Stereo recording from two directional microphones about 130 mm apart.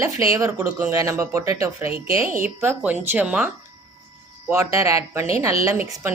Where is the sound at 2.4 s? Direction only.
10° right (ahead or behind).